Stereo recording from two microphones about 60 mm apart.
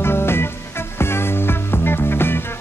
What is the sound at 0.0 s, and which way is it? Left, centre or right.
Music, left.